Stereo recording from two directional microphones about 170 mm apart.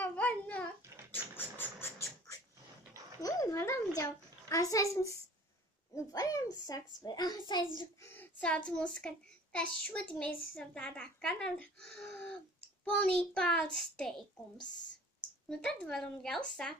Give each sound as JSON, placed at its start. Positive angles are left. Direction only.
{"t": 0.0, "sound": "babbling", "side_deg": 10}
{"t": 1.1, "sound": "a sound", "side_deg": 10}
{"t": 3.2, "sound": "a sound", "side_deg": 20}
{"t": 4.5, "sound": "a child's voice", "side_deg": 20}
{"t": 6.1, "sound": "a child's voice", "side_deg": 20}
{"t": 8.0, "sound": "a child's voice", "side_deg": 10}
{"t": 15.4, "sound": "speech", "side_deg": 5}